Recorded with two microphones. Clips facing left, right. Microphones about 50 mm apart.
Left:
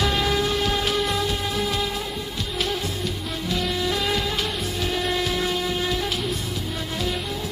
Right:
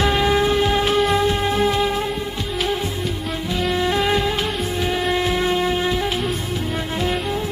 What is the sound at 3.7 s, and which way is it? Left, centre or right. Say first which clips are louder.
Music: right 8 dB; right.